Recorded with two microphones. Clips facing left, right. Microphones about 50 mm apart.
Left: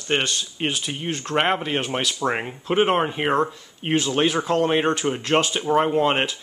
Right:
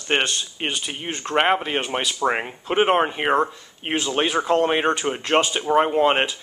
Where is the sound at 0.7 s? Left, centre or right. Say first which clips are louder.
Left 2 dB; centre.